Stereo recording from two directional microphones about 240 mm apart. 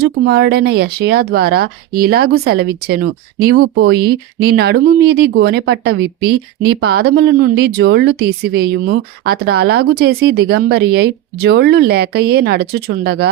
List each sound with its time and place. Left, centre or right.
0.0 s speech: right